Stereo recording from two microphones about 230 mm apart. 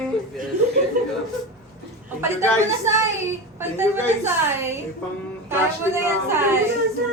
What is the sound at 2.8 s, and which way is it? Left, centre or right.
A woman's voice, centre.